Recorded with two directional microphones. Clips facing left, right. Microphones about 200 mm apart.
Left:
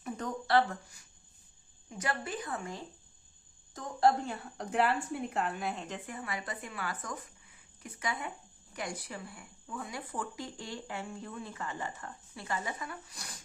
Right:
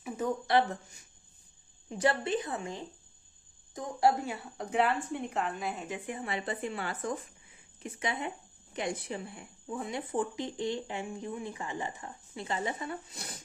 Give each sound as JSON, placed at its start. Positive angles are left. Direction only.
{"t": 0.4, "sound": "speech", "side_deg": -20}
{"t": 3.8, "sound": "a woman's voice", "side_deg": -10}
{"t": 6.1, "sound": "speech", "side_deg": -25}